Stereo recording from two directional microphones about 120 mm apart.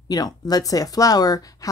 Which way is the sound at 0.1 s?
30° left (ahead or behind).